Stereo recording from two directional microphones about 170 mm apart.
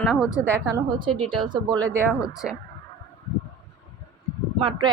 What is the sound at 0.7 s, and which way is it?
Speech, 25° right (ahead or behind).